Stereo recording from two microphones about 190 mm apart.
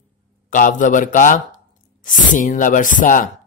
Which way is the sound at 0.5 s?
40° left (ahead or behind).